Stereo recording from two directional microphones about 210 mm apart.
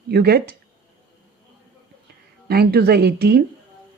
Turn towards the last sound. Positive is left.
turn(degrees=-50)  # may be behind; listen again after turning